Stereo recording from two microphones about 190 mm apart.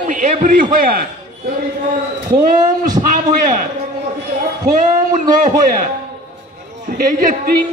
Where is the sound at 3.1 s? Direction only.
45° right (ahead or behind).